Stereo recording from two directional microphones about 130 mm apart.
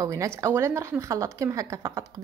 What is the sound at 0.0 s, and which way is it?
A woman's voice, 25° right (ahead or behind).